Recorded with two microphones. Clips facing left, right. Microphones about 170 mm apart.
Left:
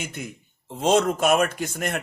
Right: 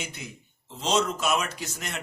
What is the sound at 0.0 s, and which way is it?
A man's voice, 50° left (ahead or behind).